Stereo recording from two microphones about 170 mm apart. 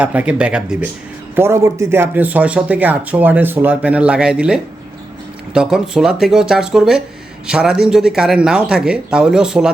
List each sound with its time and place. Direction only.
0.0 s speech: 10° right (ahead or behind)